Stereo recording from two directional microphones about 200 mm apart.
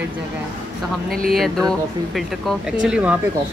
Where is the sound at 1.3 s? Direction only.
Centre (ahead or behind).